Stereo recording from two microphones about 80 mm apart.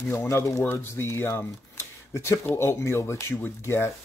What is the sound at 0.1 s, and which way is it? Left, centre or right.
Speech, left.